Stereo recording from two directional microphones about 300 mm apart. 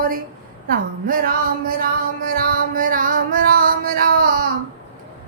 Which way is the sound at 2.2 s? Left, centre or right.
Right.